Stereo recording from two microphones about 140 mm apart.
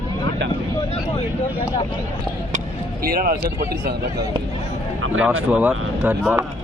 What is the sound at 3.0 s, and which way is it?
Speech, 90° right.